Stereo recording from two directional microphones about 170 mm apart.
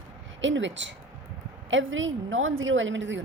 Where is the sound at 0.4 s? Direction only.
90° right.